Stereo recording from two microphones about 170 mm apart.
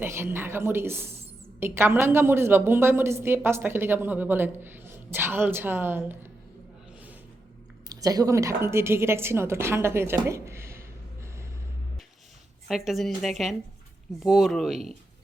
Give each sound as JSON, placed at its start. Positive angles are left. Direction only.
{"t": 0.0, "sound": "a woman's voice", "side_deg": -15}
{"t": 7.9, "sound": "speech", "side_deg": -20}
{"t": 12.6, "sound": "speech", "side_deg": 0}